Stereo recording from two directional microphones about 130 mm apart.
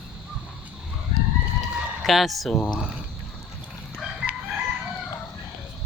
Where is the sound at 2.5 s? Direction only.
10° left (ahead or behind).